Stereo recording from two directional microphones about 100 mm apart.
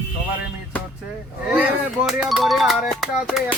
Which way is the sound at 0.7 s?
15° left (ahead or behind).